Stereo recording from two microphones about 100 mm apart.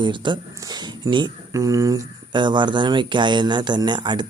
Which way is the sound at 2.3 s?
50° right (ahead or behind).